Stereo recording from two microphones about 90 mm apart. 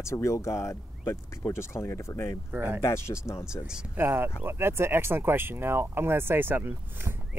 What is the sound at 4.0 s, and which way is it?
Speech, 25° right (ahead or behind).